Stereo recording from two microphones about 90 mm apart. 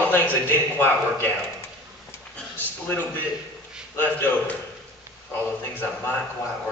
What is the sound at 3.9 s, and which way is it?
Music, 20° left (ahead or behind).